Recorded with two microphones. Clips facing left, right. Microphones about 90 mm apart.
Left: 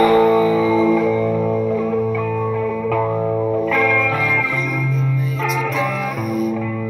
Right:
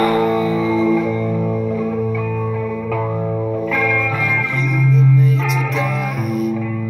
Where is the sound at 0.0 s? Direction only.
5° left (ahead or behind).